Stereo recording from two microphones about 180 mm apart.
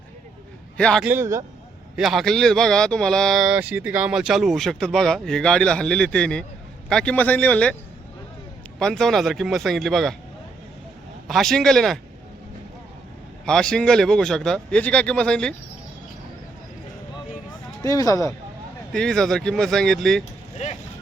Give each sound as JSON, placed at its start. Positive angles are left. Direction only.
{"t": 0.8, "sound": "speech", "side_deg": 5}
{"t": 1.0, "sound": "a man's voice", "side_deg": -15}
{"t": 2.0, "sound": "a man's voice", "side_deg": 0}
{"t": 8.8, "sound": "speech", "side_deg": 0}
{"t": 11.3, "sound": "speech", "side_deg": 0}
{"t": 13.4, "sound": "speech", "side_deg": 5}
{"t": 17.8, "sound": "a man's voice", "side_deg": 20}
{"t": 18.9, "sound": "speech", "side_deg": 5}
{"t": 20.6, "sound": "speech", "side_deg": 40}